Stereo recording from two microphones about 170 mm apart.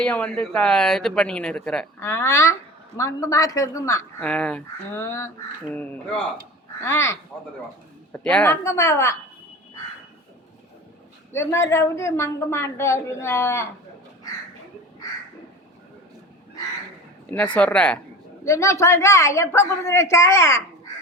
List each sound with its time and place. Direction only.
0.0 s speech: 5° left (ahead or behind)
2.0 s a woman's voice: 15° left (ahead or behind)
4.2 s a woman's voice: 5° left (ahead or behind)
4.9 s a woman's voice: 15° left (ahead or behind)
6.8 s a woman's voice: 15° left (ahead or behind)
11.3 s a woman's voice: 15° left (ahead or behind)
17.3 s a woman's voice: 10° left (ahead or behind)